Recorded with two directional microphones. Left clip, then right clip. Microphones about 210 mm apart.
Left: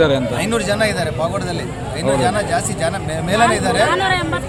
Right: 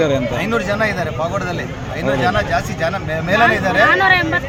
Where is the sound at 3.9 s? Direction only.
20° right (ahead or behind).